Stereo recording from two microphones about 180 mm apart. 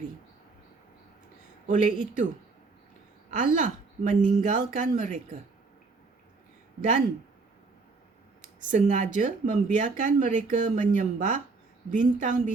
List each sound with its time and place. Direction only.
1.6 s speech: 45° right (ahead or behind)
3.2 s speech: 45° right (ahead or behind)
8.7 s speech: 45° right (ahead or behind)